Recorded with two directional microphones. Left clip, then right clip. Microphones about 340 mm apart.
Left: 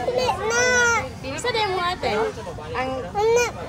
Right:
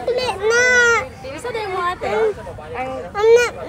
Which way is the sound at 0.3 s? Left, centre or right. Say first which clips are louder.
Right 7 dB; right.